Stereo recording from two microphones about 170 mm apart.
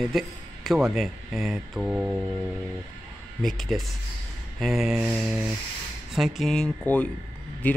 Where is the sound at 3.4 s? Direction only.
Centre (ahead or behind).